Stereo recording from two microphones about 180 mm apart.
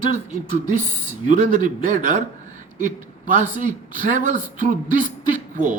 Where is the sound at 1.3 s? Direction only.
45° right (ahead or behind).